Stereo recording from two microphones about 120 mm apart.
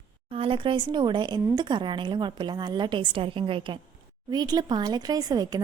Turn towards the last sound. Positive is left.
turn(degrees=-35)  # may be behind; listen again after turning